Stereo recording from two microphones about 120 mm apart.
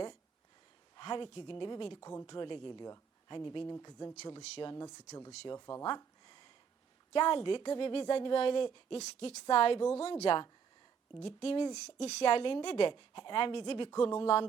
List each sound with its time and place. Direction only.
0.9 s speech: 40° left (ahead or behind)
2.0 s speech: 25° left (ahead or behind)
2.2 s speech: 40° left (ahead or behind)
6.0 s a sound: 40° left (ahead or behind)
7.1 s speech: 45° left (ahead or behind)
12.9 s speech: 45° left (ahead or behind)